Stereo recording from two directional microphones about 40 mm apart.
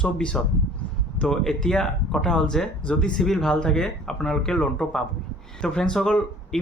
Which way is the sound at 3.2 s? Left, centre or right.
Centre.